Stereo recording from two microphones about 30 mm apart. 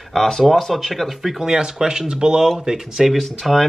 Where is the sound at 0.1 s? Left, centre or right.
Centre.